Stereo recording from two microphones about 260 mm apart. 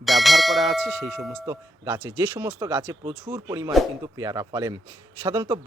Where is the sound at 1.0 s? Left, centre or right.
Centre.